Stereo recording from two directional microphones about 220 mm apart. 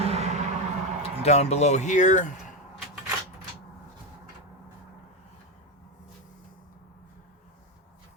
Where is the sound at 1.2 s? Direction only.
30° left (ahead or behind).